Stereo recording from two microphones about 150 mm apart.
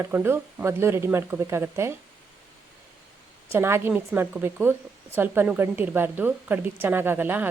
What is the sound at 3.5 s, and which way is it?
A woman's voice, 15° right (ahead or behind).